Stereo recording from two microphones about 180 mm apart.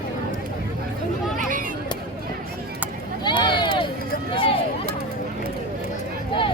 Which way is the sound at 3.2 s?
25° left (ahead or behind).